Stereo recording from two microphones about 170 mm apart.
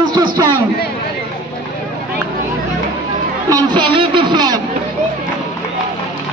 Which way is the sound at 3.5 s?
25° right (ahead or behind).